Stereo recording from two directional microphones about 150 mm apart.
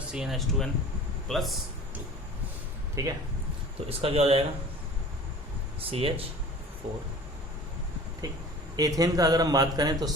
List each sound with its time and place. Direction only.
0.1 s speech: 5° right (ahead or behind)
2.9 s speech: 20° right (ahead or behind)
3.8 s speech: 40° right (ahead or behind)
5.8 s speech: 40° right (ahead or behind)
8.2 s speech: 25° right (ahead or behind)